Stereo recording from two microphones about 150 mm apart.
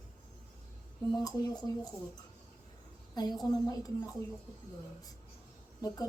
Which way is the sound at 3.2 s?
25° left (ahead or behind).